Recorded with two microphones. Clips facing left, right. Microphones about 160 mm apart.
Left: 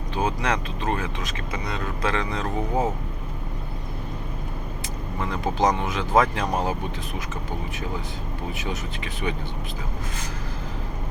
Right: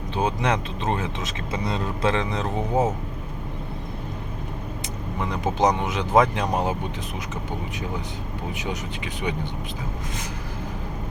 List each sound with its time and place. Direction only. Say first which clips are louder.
0.2 s speech: right 2 dB; 20° right (ahead or behind)
5.2 s speech: right 1 dB; 20° right (ahead or behind)
8.5 s speech: right 1 dB; 20° right (ahead or behind)